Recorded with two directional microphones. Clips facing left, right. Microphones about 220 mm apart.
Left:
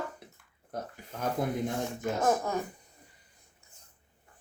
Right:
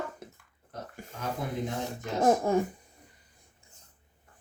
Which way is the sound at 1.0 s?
45° right (ahead or behind).